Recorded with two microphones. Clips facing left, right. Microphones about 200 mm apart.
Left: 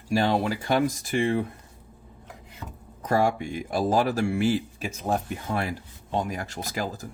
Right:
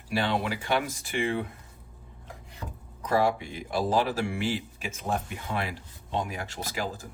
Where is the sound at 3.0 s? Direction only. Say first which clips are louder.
Left 2 dB; 50° left (ahead or behind).